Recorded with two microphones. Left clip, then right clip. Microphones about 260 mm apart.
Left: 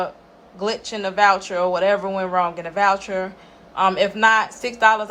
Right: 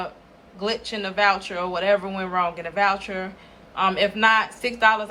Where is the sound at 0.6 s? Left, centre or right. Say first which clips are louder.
Left 3 dB; centre.